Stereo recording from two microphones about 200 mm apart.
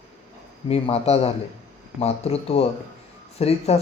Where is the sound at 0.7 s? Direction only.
30° left (ahead or behind).